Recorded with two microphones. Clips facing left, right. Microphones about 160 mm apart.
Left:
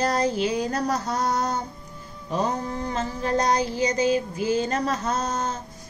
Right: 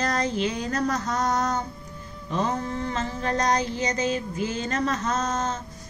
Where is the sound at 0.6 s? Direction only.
35° left (ahead or behind).